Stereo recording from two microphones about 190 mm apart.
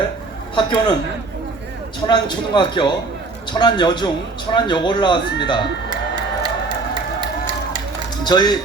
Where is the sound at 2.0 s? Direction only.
25° left (ahead or behind).